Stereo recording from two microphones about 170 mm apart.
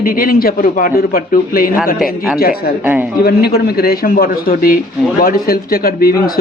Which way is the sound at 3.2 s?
65° left (ahead or behind).